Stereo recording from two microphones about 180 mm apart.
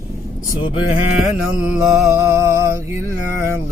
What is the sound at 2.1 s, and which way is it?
Mantra, 15° right (ahead or behind).